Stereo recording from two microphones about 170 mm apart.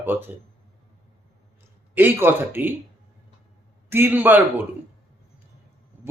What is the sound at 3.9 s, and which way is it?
Speech, 10° right (ahead or behind).